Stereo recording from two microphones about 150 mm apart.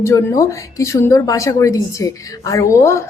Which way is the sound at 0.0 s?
20° left (ahead or behind).